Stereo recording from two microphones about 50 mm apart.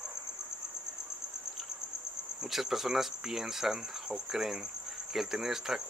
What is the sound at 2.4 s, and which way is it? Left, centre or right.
Speech, centre.